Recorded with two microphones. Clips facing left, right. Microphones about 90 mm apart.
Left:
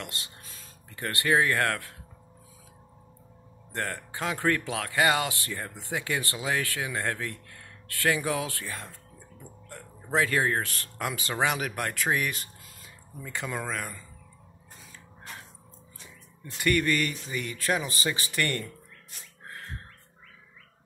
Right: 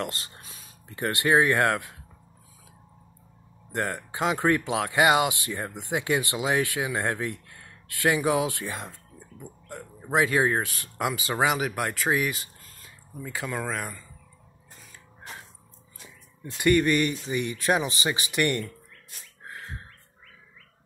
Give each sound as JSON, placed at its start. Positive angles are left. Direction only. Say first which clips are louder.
{"t": 0.0, "sound": "speech", "louder": "right 7 dB", "side_deg": -35}
{"t": 0.4, "sound": "speech", "louder": "right 1 dB", "side_deg": -20}
{"t": 3.7, "sound": "speech", "louder": "right 4 dB", "side_deg": -15}
{"t": 16.6, "sound": "speech", "louder": "right 4 dB", "side_deg": -20}